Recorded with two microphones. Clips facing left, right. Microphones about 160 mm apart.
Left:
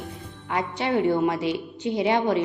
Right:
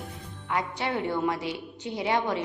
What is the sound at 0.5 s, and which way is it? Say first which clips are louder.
A woman's voice: left 5 dB; 20° left (ahead or behind).